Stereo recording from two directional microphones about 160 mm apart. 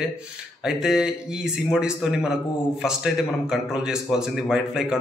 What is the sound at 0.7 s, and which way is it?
A man's voice, 5° right (ahead or behind).